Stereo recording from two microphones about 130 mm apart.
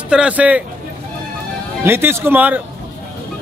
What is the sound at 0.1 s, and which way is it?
Speech, 10° right (ahead or behind).